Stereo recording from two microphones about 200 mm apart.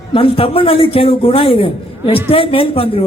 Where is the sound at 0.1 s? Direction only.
30° left (ahead or behind).